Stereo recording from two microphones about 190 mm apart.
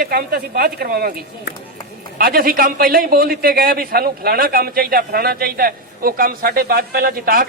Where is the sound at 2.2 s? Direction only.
50° right (ahead or behind).